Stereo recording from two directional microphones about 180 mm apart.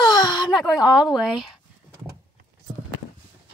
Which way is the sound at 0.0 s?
25° left (ahead or behind).